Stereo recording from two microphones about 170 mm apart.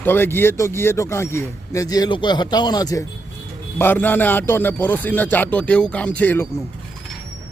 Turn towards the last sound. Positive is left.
turn(degrees=10)  # may be behind; listen again after turning